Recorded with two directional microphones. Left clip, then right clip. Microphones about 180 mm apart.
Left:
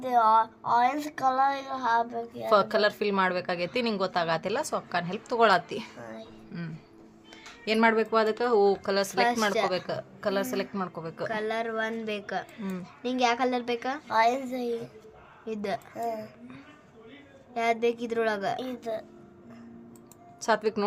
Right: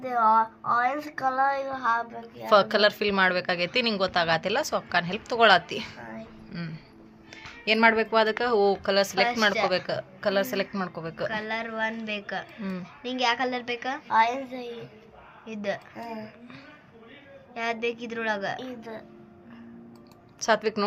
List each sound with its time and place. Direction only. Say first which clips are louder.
0.0 s speech: even; 60° left (ahead or behind)
2.5 s a woman's voice: right 3 dB; centre (ahead or behind)
11.3 s a woman's voice: left 3 dB; 40° left (ahead or behind)
14.1 s a woman's voice: right 1 dB; 90° left
15.4 s a woman's voice: even; 45° left (ahead or behind)
17.5 s a woman's voice: left 3 dB; 45° left (ahead or behind)
18.8 s a woman's voice: left 6 dB; 90° left
20.4 s a woman's voice: right 2 dB; 5° left (ahead or behind)